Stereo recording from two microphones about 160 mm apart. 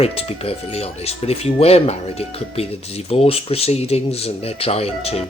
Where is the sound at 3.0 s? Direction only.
40° left (ahead or behind).